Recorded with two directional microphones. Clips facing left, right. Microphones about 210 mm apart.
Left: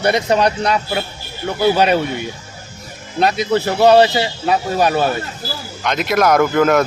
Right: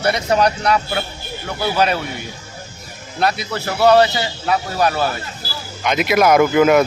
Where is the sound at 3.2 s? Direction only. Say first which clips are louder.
Left 5 dB; 20° left (ahead or behind).